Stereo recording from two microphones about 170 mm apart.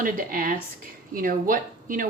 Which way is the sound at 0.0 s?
55° right (ahead or behind).